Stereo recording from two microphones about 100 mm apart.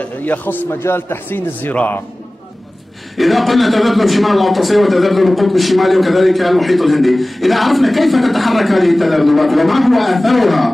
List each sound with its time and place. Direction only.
0.0 s a man's voice: 15° left (ahead or behind)
3.2 s a man's voice: centre (ahead or behind)